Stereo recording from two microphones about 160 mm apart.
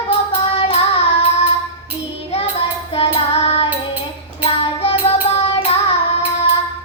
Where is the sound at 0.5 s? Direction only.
40° left (ahead or behind).